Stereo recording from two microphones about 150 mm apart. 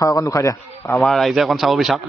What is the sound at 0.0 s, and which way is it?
Speech, 20° left (ahead or behind).